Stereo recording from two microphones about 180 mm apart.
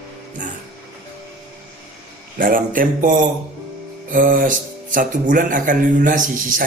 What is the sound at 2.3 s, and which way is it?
Speech, 50° right (ahead or behind).